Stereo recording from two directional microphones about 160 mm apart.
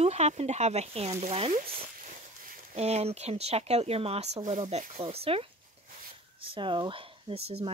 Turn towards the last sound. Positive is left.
turn(degrees=-35)  # may be behind; listen again after turning